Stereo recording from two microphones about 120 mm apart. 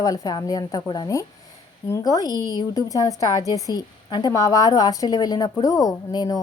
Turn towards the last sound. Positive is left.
turn(degrees=30)  # may be behind; listen again after turning